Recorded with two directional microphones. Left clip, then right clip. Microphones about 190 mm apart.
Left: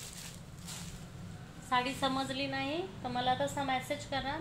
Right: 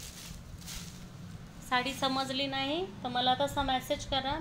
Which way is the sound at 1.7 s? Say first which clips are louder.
Right 1 dB; 45° right (ahead or behind).